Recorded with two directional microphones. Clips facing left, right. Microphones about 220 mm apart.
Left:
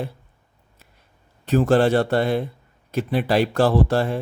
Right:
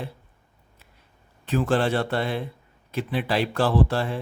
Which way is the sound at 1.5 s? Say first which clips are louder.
Left 6 dB; 40° left (ahead or behind).